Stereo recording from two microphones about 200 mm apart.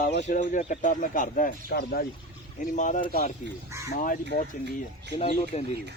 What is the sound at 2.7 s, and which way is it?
Speech, 40° left (ahead or behind).